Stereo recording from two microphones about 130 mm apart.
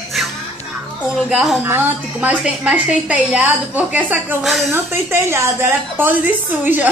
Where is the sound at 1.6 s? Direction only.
15° right (ahead or behind).